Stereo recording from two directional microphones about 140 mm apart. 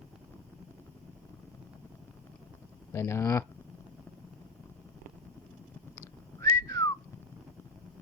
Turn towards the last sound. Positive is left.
turn(degrees=25)  # may be behind; listen again after turning